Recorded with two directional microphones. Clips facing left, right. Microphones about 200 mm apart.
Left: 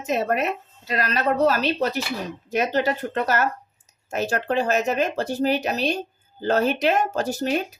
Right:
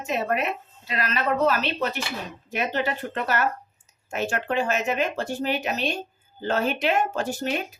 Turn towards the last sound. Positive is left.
turn(degrees=40)  # may be behind; listen again after turning